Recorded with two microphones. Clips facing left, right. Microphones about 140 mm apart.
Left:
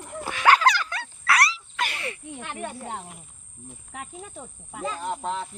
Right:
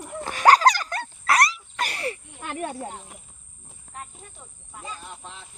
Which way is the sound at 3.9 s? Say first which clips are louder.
Left 3 dB; 90° left.